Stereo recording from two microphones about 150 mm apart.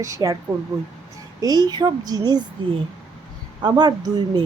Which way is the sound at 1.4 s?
25° right (ahead or behind).